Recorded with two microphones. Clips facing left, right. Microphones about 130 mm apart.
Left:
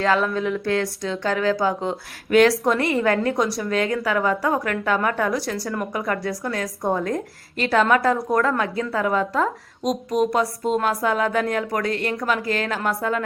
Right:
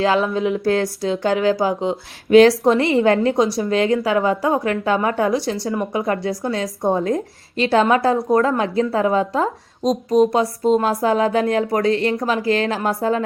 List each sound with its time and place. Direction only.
0.0 s a woman's voice: 25° right (ahead or behind)